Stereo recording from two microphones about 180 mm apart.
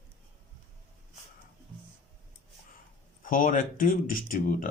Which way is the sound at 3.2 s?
50° left (ahead or behind).